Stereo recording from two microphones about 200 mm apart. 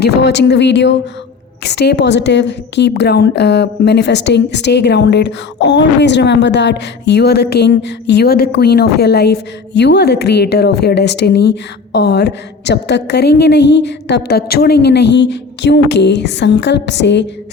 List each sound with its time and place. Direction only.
0.0 s a woman's voice: 55° left (ahead or behind)